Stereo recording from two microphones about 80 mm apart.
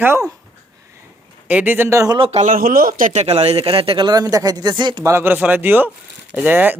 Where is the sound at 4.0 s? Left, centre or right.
Right.